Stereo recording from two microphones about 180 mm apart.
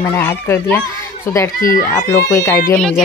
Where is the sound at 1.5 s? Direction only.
50° left (ahead or behind).